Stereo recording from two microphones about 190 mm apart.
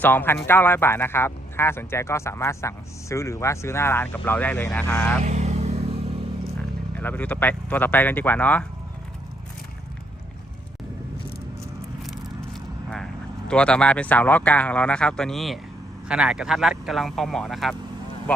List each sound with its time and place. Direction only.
0.0 s speech: 10° left (ahead or behind)
5.2 s vehicle: 35° right (ahead or behind)
6.9 s speech: 10° left (ahead or behind)
13.5 s speech: 5° left (ahead or behind)